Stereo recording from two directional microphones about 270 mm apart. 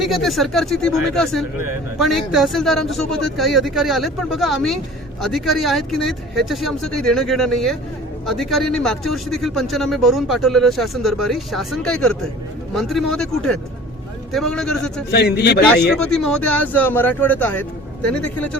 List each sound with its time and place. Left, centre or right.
0.0 s speech: centre
15.1 s speech: left
15.9 s speech: centre